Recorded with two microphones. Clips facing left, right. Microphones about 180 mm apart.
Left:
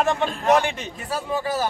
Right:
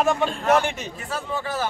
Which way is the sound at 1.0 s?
10° left (ahead or behind).